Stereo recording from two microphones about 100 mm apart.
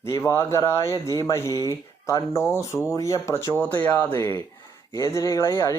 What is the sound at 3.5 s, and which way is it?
Speech, 20° left (ahead or behind).